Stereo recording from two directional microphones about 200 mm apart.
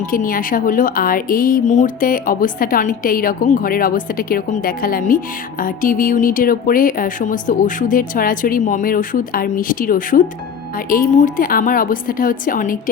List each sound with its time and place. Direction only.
0.1 s a woman's voice: 45° left (ahead or behind)